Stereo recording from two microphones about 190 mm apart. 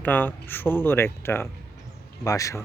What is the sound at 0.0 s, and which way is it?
Speech, 10° left (ahead or behind).